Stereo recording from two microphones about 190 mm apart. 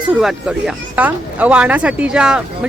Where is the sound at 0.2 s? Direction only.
5° right (ahead or behind).